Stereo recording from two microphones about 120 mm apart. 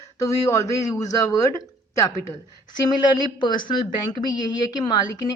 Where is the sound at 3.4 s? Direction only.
40° left (ahead or behind).